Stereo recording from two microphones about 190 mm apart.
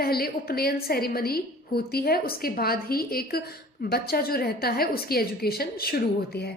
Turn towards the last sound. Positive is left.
turn(degrees=55)  # may be behind; listen again after turning